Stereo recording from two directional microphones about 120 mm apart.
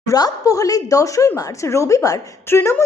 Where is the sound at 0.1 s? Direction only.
30° left (ahead or behind).